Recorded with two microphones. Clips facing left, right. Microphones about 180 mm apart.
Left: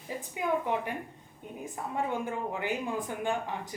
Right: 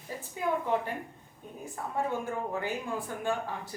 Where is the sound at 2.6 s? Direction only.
15° left (ahead or behind).